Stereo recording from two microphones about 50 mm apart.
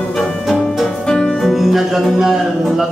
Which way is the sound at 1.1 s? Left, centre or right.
Centre.